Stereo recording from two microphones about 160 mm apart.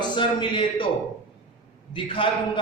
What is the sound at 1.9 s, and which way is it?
Speech, 35° left (ahead or behind).